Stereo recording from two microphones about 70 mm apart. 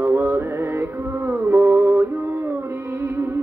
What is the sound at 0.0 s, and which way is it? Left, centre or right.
Music, right.